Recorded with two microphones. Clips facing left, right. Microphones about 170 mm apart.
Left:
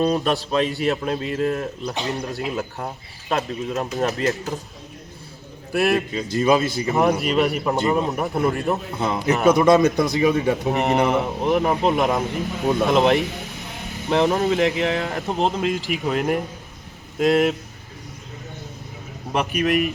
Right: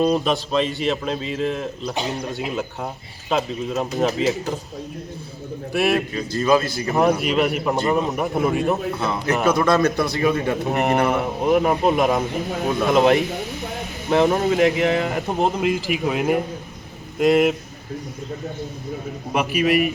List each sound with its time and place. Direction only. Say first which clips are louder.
0.0 s speech: right 1 dB; centre (ahead or behind)
5.7 s speech: even; centre (ahead or behind)
6.3 s speech: even; 20° left (ahead or behind)
6.9 s speech: right 1 dB; centre (ahead or behind)
9.0 s speech: left 1 dB; 20° left (ahead or behind)
10.3 s speech: left 1 dB; centre (ahead or behind)
19.3 s speech: right 1 dB; 5° right (ahead or behind)